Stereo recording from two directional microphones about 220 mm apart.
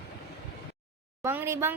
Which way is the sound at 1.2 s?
10° right (ahead or behind).